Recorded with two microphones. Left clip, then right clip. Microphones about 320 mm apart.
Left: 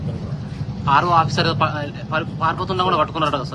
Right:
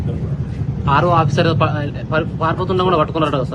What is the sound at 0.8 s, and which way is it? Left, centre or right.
Speech, centre.